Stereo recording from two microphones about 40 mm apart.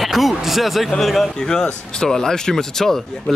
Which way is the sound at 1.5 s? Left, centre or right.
Centre.